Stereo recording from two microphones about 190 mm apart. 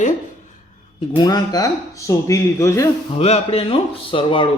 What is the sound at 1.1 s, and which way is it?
Speech, 20° left (ahead or behind).